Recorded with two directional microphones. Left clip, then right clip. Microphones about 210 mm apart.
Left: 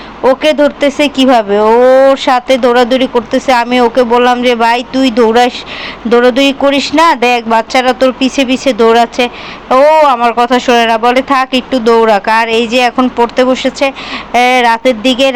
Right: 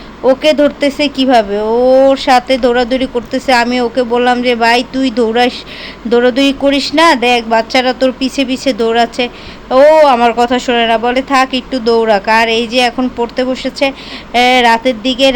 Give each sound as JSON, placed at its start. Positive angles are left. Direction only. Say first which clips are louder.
{"t": 0.3, "sound": "speech", "louder": "left 1 dB", "side_deg": -5}